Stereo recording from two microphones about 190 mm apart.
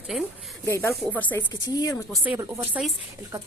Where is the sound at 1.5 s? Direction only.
20° left (ahead or behind).